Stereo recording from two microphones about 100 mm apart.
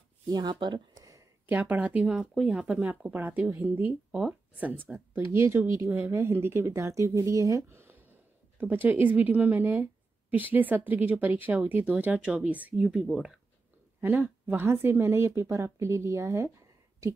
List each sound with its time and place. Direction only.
0.3 s speech: 45° right (ahead or behind)
1.5 s speech: 15° right (ahead or behind)
4.1 s speech: 10° right (ahead or behind)
12.8 s speech: 5° right (ahead or behind)
14.0 s speech: 20° right (ahead or behind)